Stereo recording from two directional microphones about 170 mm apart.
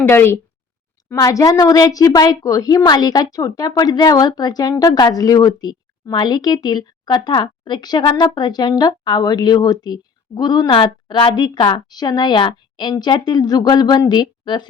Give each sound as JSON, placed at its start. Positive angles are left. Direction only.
{"t": 0.0, "sound": "a woman's voice", "side_deg": 15}